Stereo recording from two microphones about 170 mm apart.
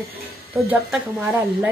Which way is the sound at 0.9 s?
10° right (ahead or behind).